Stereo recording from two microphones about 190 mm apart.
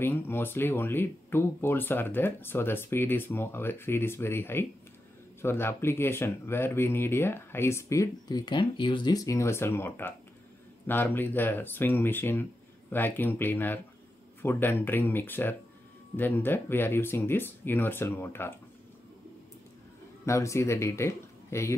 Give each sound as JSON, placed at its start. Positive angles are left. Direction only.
{"t": 0.0, "sound": "speech", "side_deg": 10}
{"t": 20.2, "sound": "speech", "side_deg": 15}